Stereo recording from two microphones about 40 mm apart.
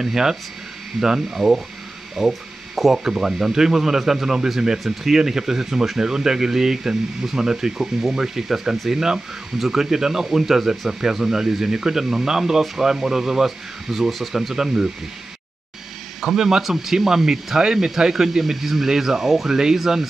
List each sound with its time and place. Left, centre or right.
0.0 s speech: centre
16.2 s speech: centre